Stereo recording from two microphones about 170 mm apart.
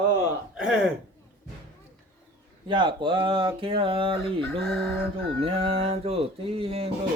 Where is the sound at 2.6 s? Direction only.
30° right (ahead or behind).